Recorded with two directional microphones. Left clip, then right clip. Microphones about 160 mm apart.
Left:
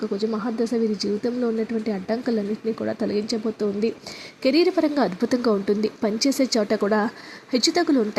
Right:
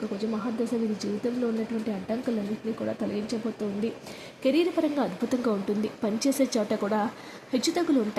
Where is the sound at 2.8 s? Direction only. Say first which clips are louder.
Left 5 dB; 30° left (ahead or behind).